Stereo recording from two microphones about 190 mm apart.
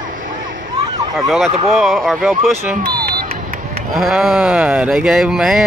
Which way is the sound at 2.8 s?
50° right (ahead or behind).